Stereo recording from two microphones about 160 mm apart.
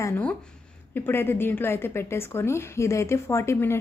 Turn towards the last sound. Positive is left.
turn(degrees=15)  # may be behind; listen again after turning